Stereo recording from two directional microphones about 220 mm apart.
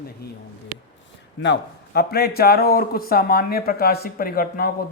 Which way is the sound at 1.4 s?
50° left (ahead or behind).